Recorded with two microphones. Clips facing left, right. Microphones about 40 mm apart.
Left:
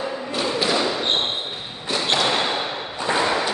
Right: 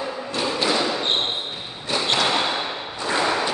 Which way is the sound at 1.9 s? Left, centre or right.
Centre.